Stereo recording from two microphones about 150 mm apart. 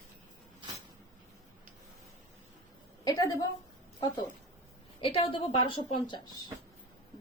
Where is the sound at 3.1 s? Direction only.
25° left (ahead or behind).